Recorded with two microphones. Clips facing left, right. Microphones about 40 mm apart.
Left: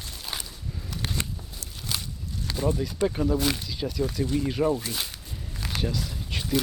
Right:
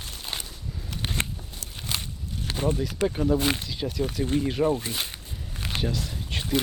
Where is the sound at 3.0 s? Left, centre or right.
Centre.